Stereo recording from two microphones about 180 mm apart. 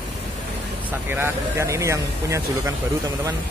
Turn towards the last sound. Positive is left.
turn(degrees=-15)  # may be behind; listen again after turning